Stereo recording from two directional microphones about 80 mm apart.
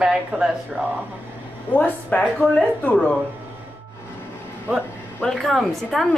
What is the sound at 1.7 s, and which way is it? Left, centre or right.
A woman's voice, left.